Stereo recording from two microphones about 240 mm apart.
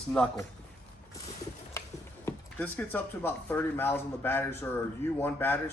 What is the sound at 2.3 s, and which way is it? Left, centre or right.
Speech, centre.